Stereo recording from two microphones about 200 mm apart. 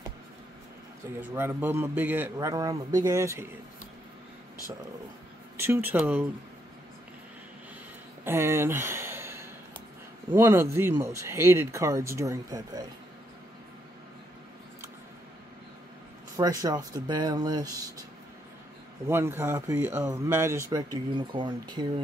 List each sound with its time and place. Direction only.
1.3 s speech: 10° right (ahead or behind)
5.6 s speech: 10° right (ahead or behind)
8.2 s a sound: 10° right (ahead or behind)
10.3 s speech: 10° right (ahead or behind)
16.3 s speech: 15° right (ahead or behind)
19.0 s speech: 10° right (ahead or behind)